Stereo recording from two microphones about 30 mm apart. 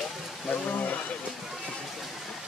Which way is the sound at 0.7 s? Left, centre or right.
Left.